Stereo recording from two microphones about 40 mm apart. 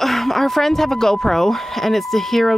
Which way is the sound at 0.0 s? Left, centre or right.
Centre.